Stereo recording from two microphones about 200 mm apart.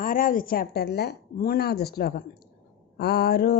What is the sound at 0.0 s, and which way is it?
Mantra, 45° left (ahead or behind).